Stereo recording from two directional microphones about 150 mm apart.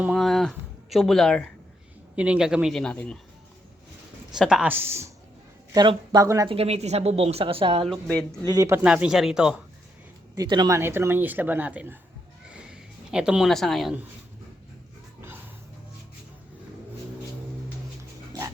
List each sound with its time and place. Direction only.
0.0 s speech: centre (ahead or behind)
2.1 s a man's voice: 10° right (ahead or behind)
4.3 s speech: 5° right (ahead or behind)
5.7 s speech: 30° right (ahead or behind)
6.5 s a woman's voice: 45° right (ahead or behind)
7.9 s a man's voice: 5° left (ahead or behind)
8.4 s speech: 25° right (ahead or behind)
8.8 s a man's voice: 5° right (ahead or behind)
10.3 s speech: 30° right (ahead or behind)
10.8 s speech: 15° right (ahead or behind)
12.5 s a sound: 5° right (ahead or behind)